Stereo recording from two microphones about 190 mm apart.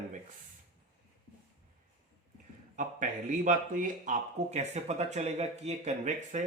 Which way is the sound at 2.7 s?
45° right (ahead or behind).